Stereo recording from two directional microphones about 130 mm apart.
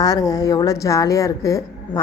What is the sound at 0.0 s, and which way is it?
A woman's voice, 30° left (ahead or behind).